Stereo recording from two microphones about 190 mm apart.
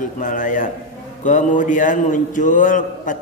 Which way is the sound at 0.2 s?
45° left (ahead or behind).